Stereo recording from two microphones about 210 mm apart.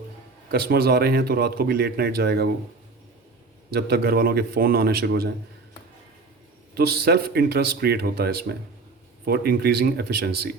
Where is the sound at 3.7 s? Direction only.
45° right (ahead or behind).